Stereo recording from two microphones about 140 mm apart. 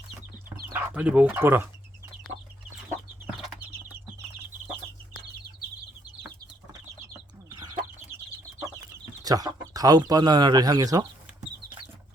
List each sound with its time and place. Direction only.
0.7 s speech: 10° right (ahead or behind)
7.5 s chicken: 25° right (ahead or behind)
9.2 s speech: 25° right (ahead or behind)